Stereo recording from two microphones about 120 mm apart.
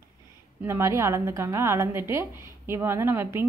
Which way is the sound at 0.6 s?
25° right (ahead or behind).